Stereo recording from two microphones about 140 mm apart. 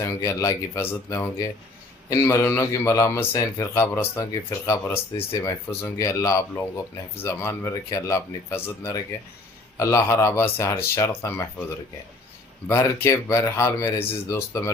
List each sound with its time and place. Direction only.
0.0 s speech: 25° left (ahead or behind)
12.6 s speech: 20° left (ahead or behind)